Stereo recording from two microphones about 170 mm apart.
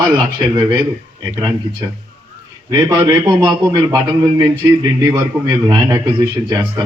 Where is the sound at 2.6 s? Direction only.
25° right (ahead or behind).